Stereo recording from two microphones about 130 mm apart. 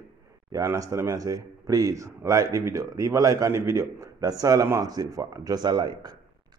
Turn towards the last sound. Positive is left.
turn(degrees=-35)  # may be behind; listen again after turning